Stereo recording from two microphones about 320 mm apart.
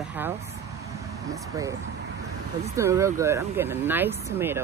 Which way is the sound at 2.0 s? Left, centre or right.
Right.